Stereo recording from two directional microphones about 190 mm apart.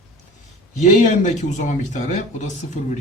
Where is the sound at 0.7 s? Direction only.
40° left (ahead or behind).